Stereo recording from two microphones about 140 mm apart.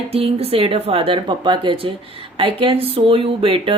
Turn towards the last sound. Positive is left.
turn(degrees=-40)  # may be behind; listen again after turning